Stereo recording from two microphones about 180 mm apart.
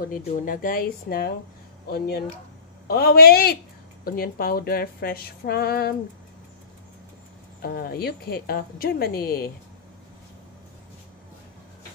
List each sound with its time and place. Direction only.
0.1 s speech: 50° left (ahead or behind)
7.6 s speech: 55° left (ahead or behind)